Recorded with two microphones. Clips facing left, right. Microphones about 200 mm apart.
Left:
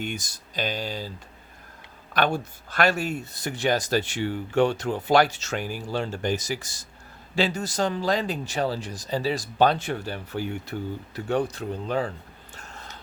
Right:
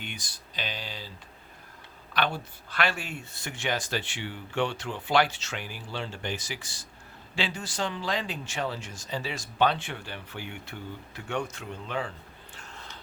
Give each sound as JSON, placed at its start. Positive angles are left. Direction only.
{"t": 0.0, "sound": "speech", "side_deg": 45}
{"t": 2.1, "sound": "speech", "side_deg": 45}
{"t": 12.5, "sound": "a sound", "side_deg": 45}